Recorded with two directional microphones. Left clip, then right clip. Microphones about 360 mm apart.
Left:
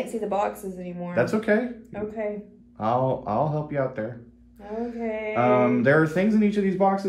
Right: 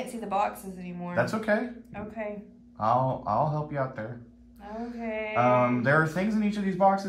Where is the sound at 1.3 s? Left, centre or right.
Centre.